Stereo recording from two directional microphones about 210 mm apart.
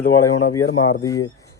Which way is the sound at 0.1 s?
15° left (ahead or behind).